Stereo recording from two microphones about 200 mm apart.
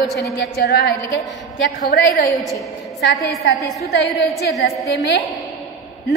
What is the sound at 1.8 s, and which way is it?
A woman's voice, 55° left (ahead or behind).